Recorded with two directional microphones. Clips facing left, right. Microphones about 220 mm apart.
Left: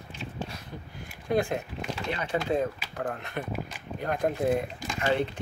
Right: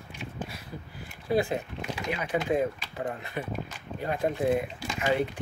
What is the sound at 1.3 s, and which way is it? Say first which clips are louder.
Speech: even; 5° right (ahead or behind).